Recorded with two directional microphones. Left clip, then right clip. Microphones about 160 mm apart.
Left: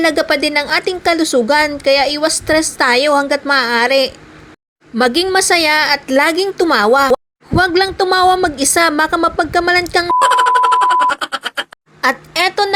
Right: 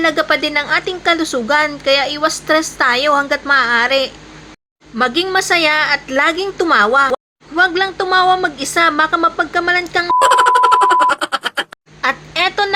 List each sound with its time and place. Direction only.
0.0 s a woman's voice: 40° left (ahead or behind)
10.2 s a sound: centre (ahead or behind)
12.0 s a woman's voice: 45° left (ahead or behind)